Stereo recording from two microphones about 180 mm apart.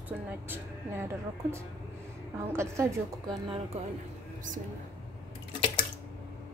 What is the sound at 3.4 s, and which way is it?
Speech, 30° right (ahead or behind).